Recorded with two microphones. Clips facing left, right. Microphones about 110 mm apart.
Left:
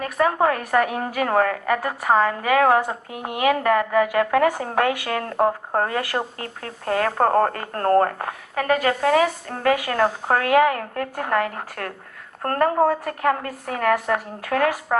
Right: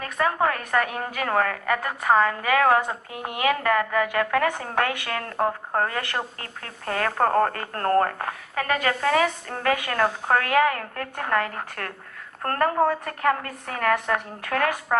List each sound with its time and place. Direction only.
0.0 s a woman's voice: 30° left (ahead or behind)